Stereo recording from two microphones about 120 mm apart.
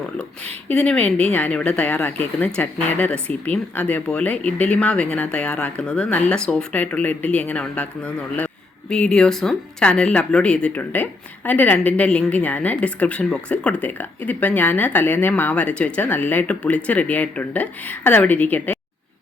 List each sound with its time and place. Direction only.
0.7 s speech: 10° left (ahead or behind)